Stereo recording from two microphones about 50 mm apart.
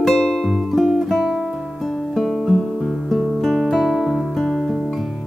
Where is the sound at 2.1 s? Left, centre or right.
Centre.